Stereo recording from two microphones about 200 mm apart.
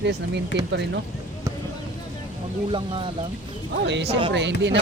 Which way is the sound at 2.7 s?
25° right (ahead or behind).